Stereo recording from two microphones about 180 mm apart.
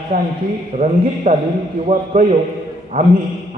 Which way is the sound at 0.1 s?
50° right (ahead or behind).